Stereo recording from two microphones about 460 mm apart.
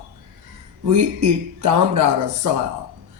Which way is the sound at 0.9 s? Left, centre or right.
Right.